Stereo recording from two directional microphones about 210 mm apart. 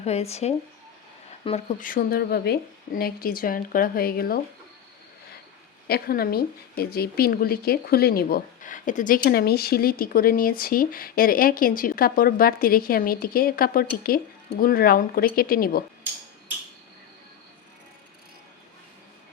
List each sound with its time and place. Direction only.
0.0 s a woman's voice: 30° left (ahead or behind)
5.9 s a woman's voice: 45° left (ahead or behind)